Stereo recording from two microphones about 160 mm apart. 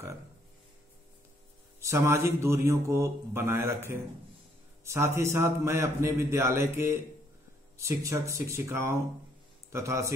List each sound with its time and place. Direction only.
1.8 s speech: 15° right (ahead or behind)